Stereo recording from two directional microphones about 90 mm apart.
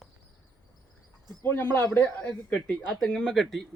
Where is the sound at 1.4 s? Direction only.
25° left (ahead or behind).